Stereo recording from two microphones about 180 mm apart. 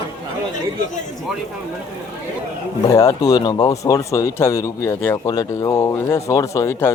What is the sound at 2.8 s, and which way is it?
Speech, 15° left (ahead or behind).